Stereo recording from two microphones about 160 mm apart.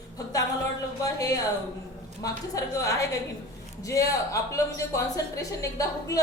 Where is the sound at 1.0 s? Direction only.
20° left (ahead or behind).